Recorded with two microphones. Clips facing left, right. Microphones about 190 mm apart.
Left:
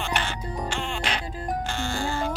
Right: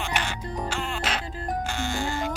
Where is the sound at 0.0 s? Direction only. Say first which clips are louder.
Left 1 dB; 10° right (ahead or behind).